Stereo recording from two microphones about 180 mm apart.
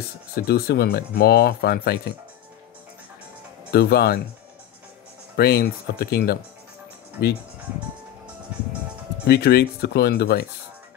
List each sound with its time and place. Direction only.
0.4 s speech: 60° left (ahead or behind)
3.7 s speech: 60° left (ahead or behind)
5.3 s speech: 55° left (ahead or behind)
9.3 s speech: 65° left (ahead or behind)